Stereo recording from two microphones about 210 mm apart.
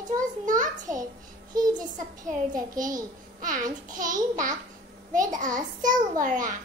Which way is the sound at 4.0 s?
40° right (ahead or behind).